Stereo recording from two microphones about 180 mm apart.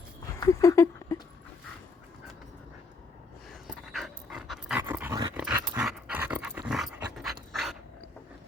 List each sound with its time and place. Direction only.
0.3 s a sound: 20° left (ahead or behind)
3.5 s pant: centre (ahead or behind)
4.8 s dog: 10° right (ahead or behind)